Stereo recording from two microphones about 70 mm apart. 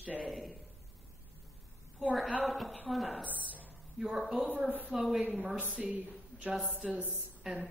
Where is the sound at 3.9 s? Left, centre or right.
Centre.